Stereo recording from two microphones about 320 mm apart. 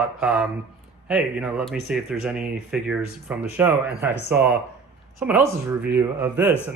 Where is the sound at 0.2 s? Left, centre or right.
Centre.